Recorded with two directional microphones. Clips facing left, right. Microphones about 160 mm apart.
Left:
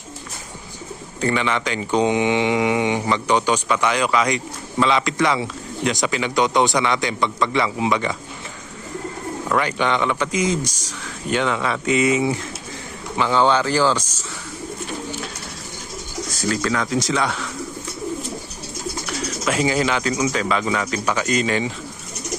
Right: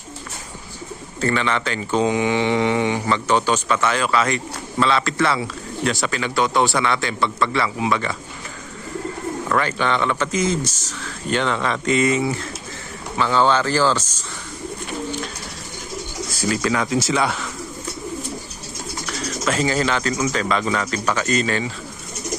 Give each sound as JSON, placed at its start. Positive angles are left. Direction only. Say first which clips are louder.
{"t": 1.2, "sound": "speech", "louder": "even", "side_deg": 15}
{"t": 9.5, "sound": "speech", "louder": "left 1 dB", "side_deg": 15}
{"t": 16.5, "sound": "speech", "louder": "right 1 dB", "side_deg": -10}
{"t": 19.5, "sound": "speech", "louder": "even", "side_deg": 10}